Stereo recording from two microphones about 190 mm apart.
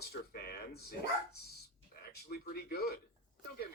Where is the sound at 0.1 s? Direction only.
55° left (ahead or behind).